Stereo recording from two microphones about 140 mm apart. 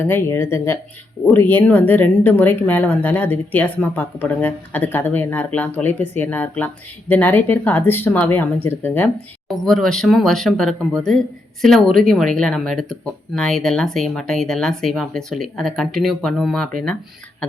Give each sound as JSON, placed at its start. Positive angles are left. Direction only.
{"t": 0.0, "sound": "speech", "side_deg": 15}
{"t": 9.5, "sound": "speech", "side_deg": 0}